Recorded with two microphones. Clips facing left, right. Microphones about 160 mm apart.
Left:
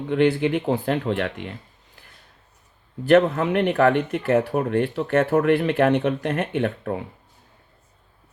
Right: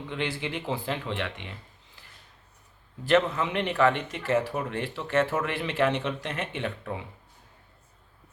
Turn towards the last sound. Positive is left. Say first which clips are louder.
# left 9 dB
turn(degrees=50)  # may be behind; listen again after turning